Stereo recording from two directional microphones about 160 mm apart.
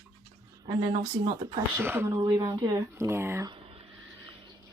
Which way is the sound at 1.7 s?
15° right (ahead or behind).